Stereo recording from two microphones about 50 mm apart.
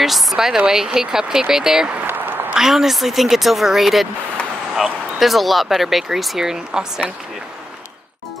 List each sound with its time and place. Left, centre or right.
0.0 s speech: centre
2.0 s a sound: right
2.5 s speech: centre
5.2 s speech: centre